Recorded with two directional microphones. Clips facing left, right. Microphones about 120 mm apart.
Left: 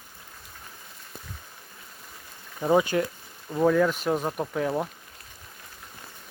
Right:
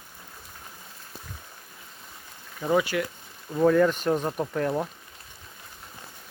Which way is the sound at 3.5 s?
5° left (ahead or behind).